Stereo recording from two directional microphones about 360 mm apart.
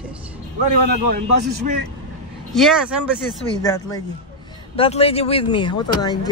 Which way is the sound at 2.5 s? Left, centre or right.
Centre.